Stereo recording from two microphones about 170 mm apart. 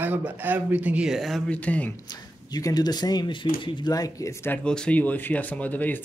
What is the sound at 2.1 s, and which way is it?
Speech, 20° left (ahead or behind).